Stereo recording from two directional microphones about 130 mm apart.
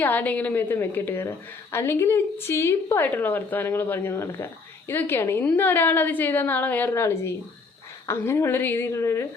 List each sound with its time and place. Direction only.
0.0 s a woman's voice: 15° left (ahead or behind)